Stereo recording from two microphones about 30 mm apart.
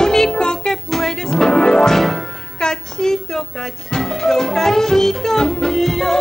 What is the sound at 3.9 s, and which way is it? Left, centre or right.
Music, left.